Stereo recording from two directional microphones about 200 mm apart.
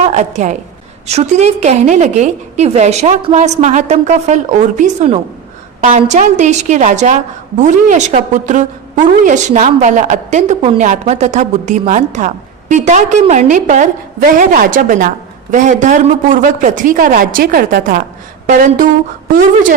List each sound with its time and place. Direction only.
0.0 s a woman's voice: 35° right (ahead or behind)